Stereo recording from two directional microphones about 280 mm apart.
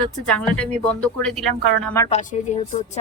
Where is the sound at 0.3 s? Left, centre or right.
Centre.